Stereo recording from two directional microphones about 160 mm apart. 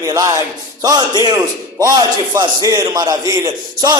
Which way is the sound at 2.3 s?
25° right (ahead or behind).